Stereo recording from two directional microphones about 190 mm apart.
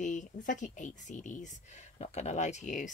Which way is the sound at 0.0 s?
40° left (ahead or behind).